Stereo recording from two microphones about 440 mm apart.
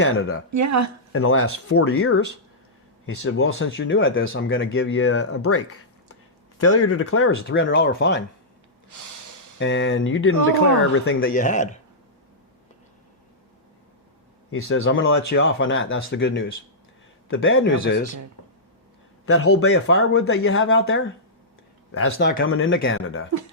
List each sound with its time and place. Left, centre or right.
0.0 s speech: left
0.5 s speech: right
1.1 s speech: left
9.6 s speech: left
14.5 s speech: left
19.2 s speech: left